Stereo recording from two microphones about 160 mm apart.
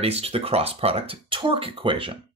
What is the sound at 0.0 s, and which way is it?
Speech, 40° right (ahead or behind).